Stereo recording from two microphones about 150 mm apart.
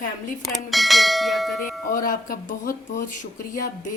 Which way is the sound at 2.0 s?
65° left (ahead or behind).